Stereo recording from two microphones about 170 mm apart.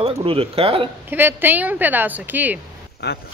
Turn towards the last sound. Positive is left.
turn(degrees=70)  # may be behind; listen again after turning